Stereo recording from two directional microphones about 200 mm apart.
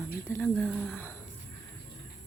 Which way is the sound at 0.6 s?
5° right (ahead or behind).